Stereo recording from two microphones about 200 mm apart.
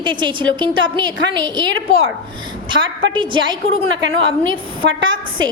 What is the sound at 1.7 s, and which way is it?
Speech, 85° right.